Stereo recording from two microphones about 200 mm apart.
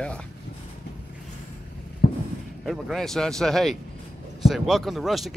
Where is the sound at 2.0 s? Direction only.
50° left (ahead or behind).